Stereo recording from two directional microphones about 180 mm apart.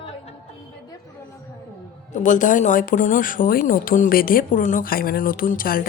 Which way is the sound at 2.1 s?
45° left (ahead or behind).